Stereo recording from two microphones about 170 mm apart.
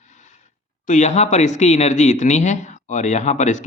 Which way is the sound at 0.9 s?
45° left (ahead or behind).